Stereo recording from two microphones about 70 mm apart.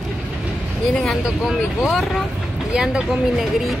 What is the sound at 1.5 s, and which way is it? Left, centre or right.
Speech, centre.